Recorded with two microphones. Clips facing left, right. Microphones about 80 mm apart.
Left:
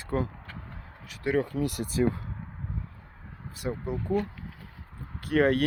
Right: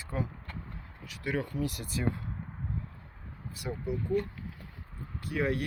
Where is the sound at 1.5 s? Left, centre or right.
Left.